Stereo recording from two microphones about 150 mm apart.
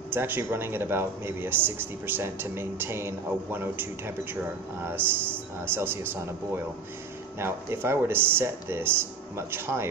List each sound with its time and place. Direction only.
0.1 s speech: 15° right (ahead or behind)